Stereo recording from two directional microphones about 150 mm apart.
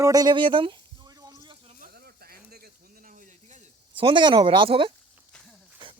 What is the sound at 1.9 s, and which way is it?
Sizzle, 90° right.